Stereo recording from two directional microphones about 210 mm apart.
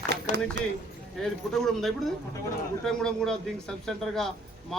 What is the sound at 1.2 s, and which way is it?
A man's voice, centre (ahead or behind).